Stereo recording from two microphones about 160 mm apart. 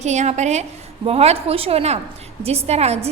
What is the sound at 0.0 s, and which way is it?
A woman's voice, 45° right (ahead or behind).